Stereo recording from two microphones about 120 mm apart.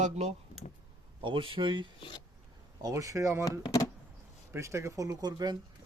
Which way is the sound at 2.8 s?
30° right (ahead or behind).